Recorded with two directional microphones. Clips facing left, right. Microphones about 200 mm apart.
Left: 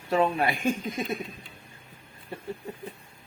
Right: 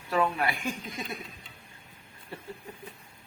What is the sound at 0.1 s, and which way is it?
Speech, 25° left (ahead or behind).